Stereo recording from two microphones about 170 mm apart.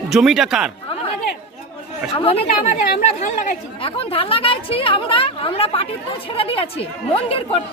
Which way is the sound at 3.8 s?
35° left (ahead or behind).